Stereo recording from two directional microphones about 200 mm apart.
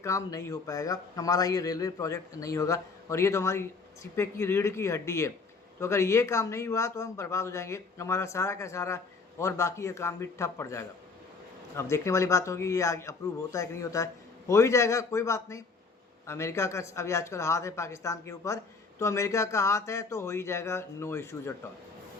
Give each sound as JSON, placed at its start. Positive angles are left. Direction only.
{"t": 0.0, "sound": "speech", "side_deg": 15}